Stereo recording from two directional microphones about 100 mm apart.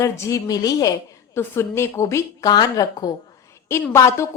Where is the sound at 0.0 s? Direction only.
30° left (ahead or behind).